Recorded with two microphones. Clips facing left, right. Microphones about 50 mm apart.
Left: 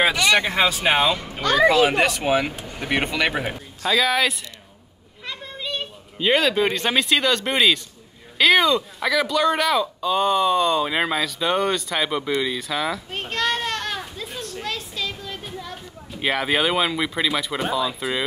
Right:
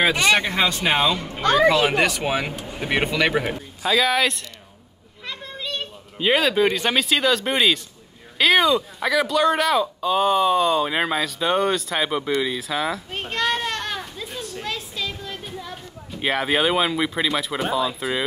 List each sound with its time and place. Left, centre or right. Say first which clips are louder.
0.1 s speech: right 1 dB; centre
0.4 s speech: left 1 dB; centre
2.6 s vehicle: right 2 dB; centre
2.9 s speech: right 2 dB; centre
5.2 s children playing: even; centre
6.1 s speech: even; centre